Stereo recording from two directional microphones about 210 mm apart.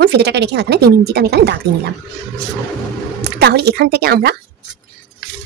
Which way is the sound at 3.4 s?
50° right (ahead or behind).